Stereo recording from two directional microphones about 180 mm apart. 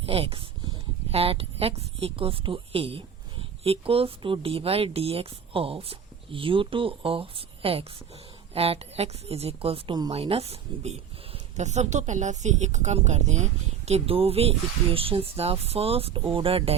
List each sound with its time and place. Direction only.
0.0 s a woman's voice: 35° right (ahead or behind)